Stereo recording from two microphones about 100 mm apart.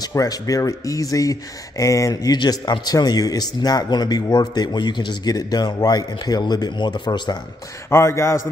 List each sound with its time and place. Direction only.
0.0 s speech: 40° left (ahead or behind)
2.3 s speech: 45° left (ahead or behind)
7.9 s a man's voice: 25° left (ahead or behind)